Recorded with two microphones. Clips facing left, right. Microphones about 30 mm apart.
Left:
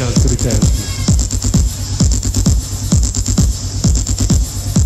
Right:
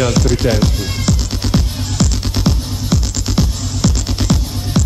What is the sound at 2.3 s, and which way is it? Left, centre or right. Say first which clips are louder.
Music: right 1 dB; right.